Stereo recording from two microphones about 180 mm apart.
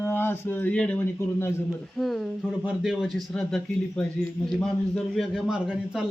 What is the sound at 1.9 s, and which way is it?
Speech, centre (ahead or behind).